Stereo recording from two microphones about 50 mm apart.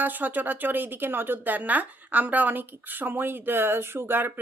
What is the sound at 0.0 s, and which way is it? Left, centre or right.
A woman's voice, right.